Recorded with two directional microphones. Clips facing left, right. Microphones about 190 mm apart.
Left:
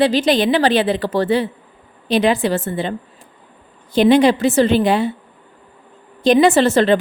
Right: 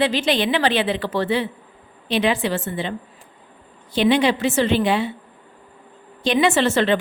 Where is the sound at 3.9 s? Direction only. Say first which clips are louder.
Left 6 dB; 45° left (ahead or behind).